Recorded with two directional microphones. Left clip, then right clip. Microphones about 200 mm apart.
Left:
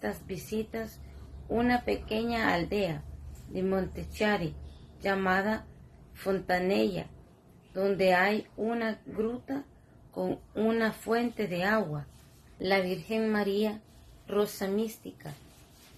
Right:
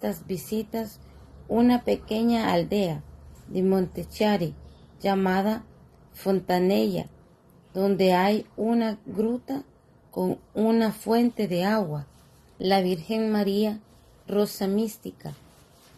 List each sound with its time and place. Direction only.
0.6 s a woman's voice: 45° right (ahead or behind)